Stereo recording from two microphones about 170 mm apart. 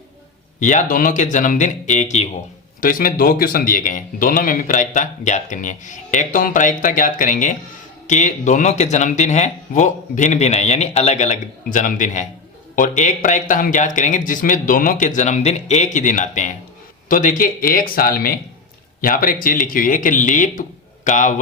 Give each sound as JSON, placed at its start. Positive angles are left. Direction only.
{"t": 0.6, "sound": "speech", "side_deg": 45}
{"t": 2.8, "sound": "speech", "side_deg": 55}